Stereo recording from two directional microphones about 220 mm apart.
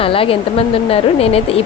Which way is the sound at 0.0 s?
25° left (ahead or behind).